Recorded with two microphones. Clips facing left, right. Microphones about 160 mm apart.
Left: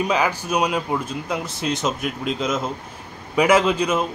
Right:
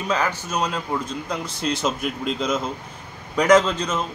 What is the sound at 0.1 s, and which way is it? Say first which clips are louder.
A man's voice: left 3 dB; 10° left (ahead or behind).